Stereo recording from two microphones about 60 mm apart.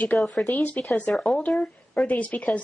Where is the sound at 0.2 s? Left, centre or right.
Centre.